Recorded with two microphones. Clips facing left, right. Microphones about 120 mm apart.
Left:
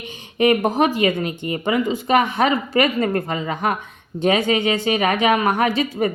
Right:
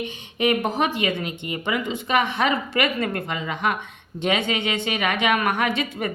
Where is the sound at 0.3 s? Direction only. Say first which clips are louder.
Left 5 dB; 40° left (ahead or behind).